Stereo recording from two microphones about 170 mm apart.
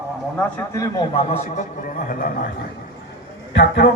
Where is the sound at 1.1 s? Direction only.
40° left (ahead or behind).